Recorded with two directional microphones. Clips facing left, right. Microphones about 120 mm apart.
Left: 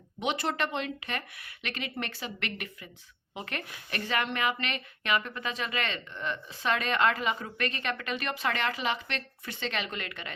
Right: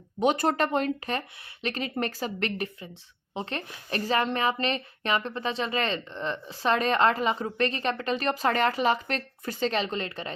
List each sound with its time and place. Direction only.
0.2 s speech: 45° right (ahead or behind)